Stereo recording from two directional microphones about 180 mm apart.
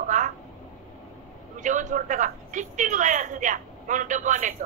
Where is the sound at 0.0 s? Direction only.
45° right (ahead or behind).